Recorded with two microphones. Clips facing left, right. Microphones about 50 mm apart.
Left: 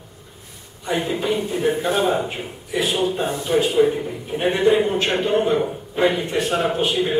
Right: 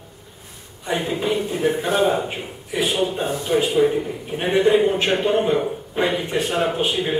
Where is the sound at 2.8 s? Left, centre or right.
Centre.